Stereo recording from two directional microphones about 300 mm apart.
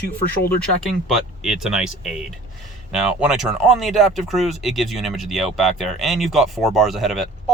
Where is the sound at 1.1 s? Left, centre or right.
Centre.